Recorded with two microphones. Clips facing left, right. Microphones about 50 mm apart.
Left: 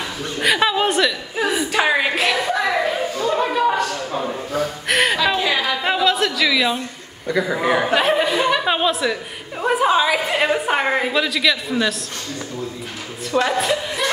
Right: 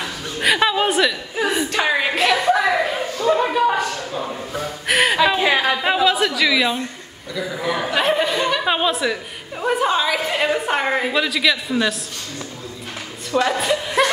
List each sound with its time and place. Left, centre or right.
0.4 s chuckle: centre
3.3 s a sound: centre
4.6 s gasp: centre
5.4 s chatter: right
5.8 s a sound: centre
7.2 s a man's voice: left
7.9 s a woman's voice: centre
13.3 s a woman's voice: centre